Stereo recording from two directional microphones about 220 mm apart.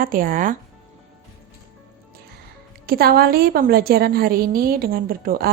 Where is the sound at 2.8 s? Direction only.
45° right (ahead or behind).